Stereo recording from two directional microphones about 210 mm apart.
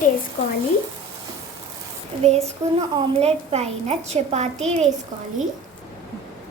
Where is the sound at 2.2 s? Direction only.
30° right (ahead or behind).